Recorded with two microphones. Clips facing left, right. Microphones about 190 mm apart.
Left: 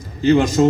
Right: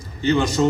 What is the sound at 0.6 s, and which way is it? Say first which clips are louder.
Speech: left 3 dB; 50° left (ahead or behind).